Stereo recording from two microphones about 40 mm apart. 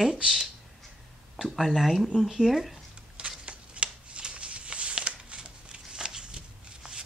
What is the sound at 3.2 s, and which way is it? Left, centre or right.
Shuffling cards, right.